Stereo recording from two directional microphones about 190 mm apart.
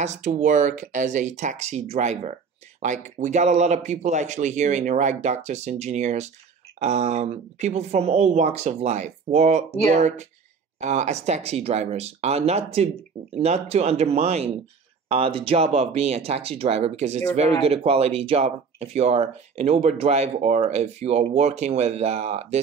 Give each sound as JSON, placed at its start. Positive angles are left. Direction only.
{"t": 0.0, "sound": "speech", "side_deg": -40}